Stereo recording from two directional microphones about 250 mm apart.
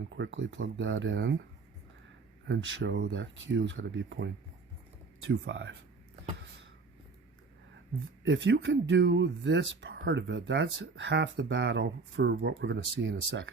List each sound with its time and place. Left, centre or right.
0.2 s speech: right
2.5 s speech: right
8.3 s speech: right